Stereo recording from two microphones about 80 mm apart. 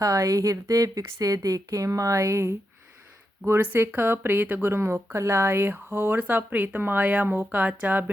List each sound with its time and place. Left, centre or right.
0.0 s speech: right